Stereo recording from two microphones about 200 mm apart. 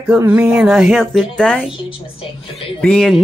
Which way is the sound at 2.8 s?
Centre (ahead or behind).